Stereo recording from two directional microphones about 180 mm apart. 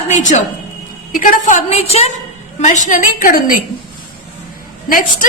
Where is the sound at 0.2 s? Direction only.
45° left (ahead or behind).